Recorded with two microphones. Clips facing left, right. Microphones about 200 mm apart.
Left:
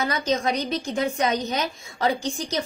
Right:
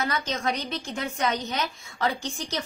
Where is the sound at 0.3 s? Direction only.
20° left (ahead or behind).